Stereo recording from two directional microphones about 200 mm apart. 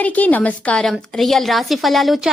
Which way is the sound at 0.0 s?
10° left (ahead or behind).